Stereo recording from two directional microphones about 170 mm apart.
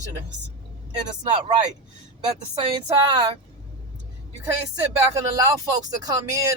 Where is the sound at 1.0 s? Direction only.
25° right (ahead or behind).